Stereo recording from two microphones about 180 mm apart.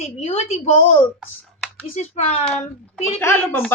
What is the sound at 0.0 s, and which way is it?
Speech, 35° left (ahead or behind).